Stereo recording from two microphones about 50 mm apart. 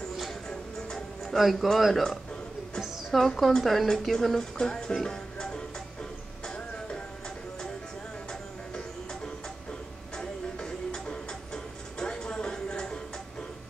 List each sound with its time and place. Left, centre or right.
0.5 s music: centre
1.2 s a man's voice: centre
2.8 s a sound: centre
3.6 s speech: centre
5.0 s music: centre
10.1 s music: centre